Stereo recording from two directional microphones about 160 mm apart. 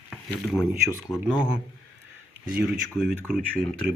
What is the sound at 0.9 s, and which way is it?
Speech, 20° left (ahead or behind).